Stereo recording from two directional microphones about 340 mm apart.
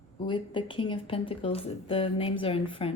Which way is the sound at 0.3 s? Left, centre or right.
Centre.